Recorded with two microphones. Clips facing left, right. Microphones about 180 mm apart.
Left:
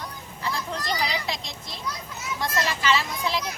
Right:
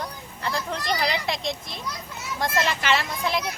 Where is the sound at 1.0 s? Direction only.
55° right (ahead or behind).